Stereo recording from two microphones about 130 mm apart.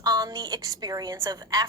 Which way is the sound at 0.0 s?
30° right (ahead or behind).